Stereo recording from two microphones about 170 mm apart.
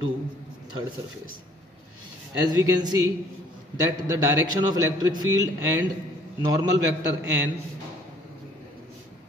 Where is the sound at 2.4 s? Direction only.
25° right (ahead or behind).